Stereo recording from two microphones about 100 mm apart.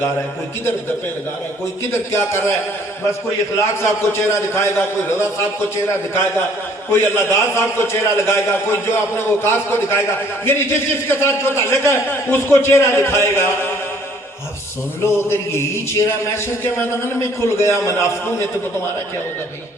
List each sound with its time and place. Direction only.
1.9 s a man's voice: 25° left (ahead or behind)
3.6 s a man's voice: 25° left (ahead or behind)
15.0 s a man's voice: 25° left (ahead or behind)